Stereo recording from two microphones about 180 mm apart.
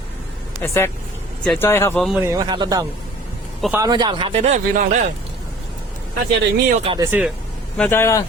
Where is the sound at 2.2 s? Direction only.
15° right (ahead or behind); by 4.8 s 40° right (ahead or behind).